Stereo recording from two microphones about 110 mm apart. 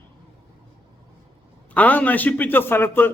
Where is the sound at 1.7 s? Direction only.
15° left (ahead or behind).